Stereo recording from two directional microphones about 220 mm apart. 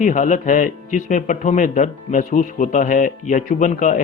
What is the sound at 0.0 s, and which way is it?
Speech, 35° left (ahead or behind).